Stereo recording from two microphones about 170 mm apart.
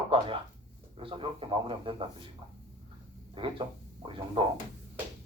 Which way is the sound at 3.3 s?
30° right (ahead or behind).